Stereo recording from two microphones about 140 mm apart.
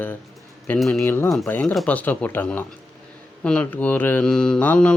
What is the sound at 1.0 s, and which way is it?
Mantra, 15° left (ahead or behind).